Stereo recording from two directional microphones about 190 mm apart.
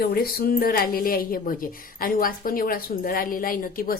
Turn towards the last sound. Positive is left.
turn(degrees=50)  # may be behind; listen again after turning